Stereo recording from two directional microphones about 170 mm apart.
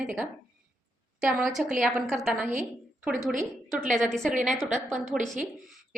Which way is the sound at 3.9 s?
5° left (ahead or behind).